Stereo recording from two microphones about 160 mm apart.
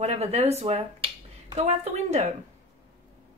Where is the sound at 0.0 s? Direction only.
40° right (ahead or behind).